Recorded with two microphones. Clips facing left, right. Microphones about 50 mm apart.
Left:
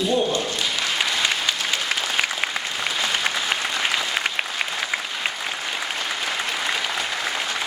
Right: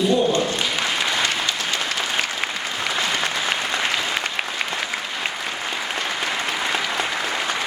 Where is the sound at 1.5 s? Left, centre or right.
Centre.